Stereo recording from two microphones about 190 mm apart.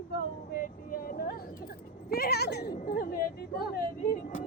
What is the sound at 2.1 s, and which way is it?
Speech, 55° left (ahead or behind).